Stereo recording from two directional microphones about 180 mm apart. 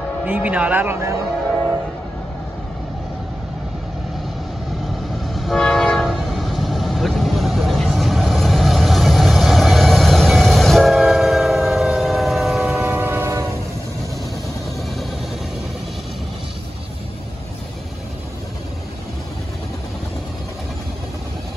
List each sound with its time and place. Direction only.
0.2 s a man's voice: 10° right (ahead or behind)
5.2 s train horn: centre (ahead or behind)